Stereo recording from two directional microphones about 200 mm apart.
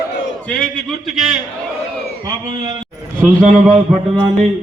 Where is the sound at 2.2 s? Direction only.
20° right (ahead or behind).